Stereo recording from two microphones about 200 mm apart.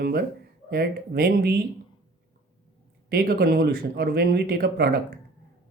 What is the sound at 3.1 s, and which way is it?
Speech, 50° right (ahead or behind).